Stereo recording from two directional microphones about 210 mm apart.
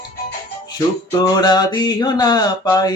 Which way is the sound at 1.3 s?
20° left (ahead or behind).